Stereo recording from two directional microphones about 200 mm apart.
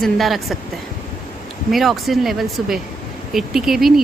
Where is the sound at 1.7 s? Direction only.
Centre (ahead or behind).